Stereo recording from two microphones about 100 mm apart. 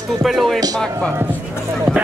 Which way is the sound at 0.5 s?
40° right (ahead or behind).